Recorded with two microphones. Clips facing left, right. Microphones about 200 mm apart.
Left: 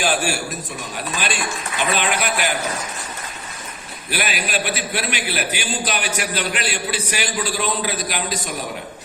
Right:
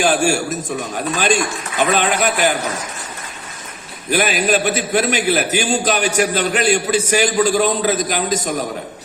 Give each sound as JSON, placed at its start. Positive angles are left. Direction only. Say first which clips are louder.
{"t": 0.0, "sound": "a man's voice", "louder": "right 6 dB", "side_deg": -45}
{"t": 4.1, "sound": "a man's voice", "louder": "right 8 dB", "side_deg": -45}